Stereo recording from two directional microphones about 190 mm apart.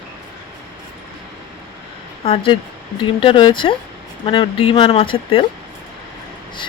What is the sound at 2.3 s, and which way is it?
Speech, 25° left (ahead or behind).